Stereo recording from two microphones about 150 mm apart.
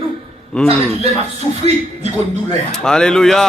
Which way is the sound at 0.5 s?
10° left (ahead or behind).